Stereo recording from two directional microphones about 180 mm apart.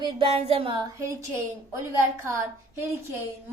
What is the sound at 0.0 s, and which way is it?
Speech, 30° right (ahead or behind).